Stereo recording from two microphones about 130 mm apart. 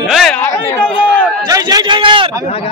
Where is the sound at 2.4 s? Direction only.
45° left (ahead or behind).